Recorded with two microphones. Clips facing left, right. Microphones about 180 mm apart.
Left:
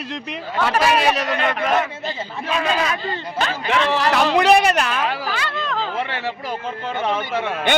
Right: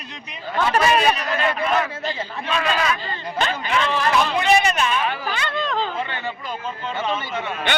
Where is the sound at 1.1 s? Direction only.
90° left.